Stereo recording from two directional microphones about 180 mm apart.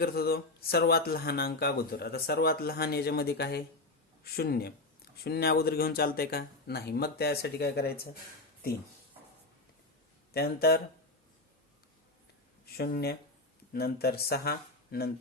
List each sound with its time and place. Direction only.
0.0 s speech: 60° left (ahead or behind)
10.3 s speech: 60° left (ahead or behind)
12.7 s speech: 60° left (ahead or behind)